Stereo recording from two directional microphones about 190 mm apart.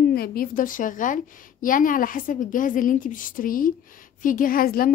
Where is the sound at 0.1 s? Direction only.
50° left (ahead or behind).